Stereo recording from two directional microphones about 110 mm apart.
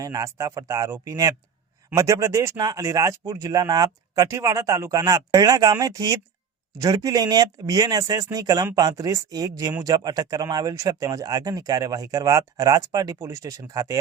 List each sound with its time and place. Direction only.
0.0 s speech: 30° right (ahead or behind)